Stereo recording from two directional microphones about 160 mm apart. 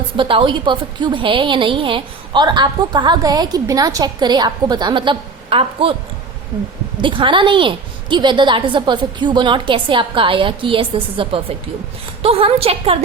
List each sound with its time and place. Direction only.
0.2 s a woman's voice: 30° right (ahead or behind)
7.0 s a woman's voice: 30° right (ahead or behind)